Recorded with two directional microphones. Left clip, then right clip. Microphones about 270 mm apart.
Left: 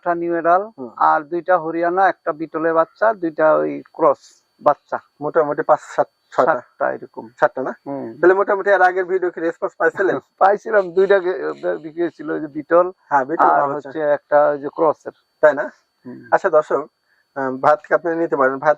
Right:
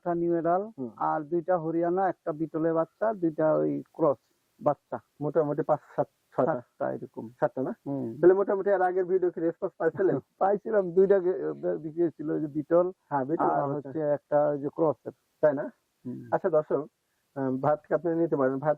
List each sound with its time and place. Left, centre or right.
0.0 s a man's voice: centre